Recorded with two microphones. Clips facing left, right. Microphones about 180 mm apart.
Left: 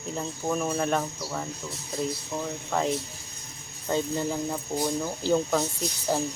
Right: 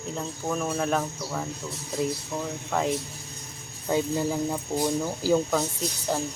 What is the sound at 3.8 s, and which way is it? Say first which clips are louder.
Speech: right 2 dB; 10° right (ahead or behind).